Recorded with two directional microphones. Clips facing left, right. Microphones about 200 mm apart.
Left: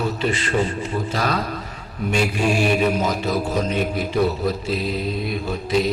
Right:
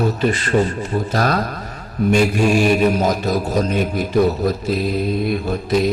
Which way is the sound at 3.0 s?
40° right (ahead or behind).